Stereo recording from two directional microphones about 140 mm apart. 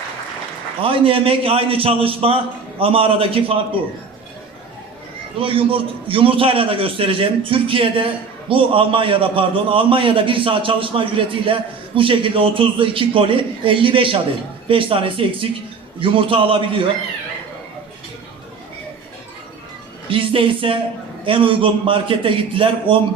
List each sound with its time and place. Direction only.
0.8 s a man's voice: 40° right (ahead or behind)
5.4 s a man's voice: 40° right (ahead or behind)
20.1 s a man's voice: 40° right (ahead or behind)